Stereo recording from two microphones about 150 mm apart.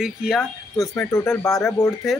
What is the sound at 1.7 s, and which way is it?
Speech, 20° left (ahead or behind).